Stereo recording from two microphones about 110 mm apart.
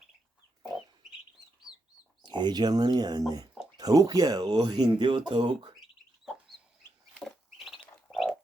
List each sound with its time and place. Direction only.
2.2 s speech: 40° right (ahead or behind)
7.3 s bird: centre (ahead or behind)